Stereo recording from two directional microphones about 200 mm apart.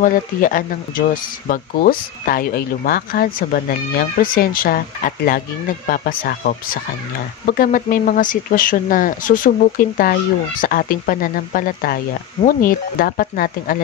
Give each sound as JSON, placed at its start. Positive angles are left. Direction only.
{"t": 0.0, "sound": "speech", "side_deg": 40}